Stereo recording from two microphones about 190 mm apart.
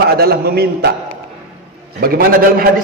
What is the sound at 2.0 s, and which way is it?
Speech, 50° right (ahead or behind).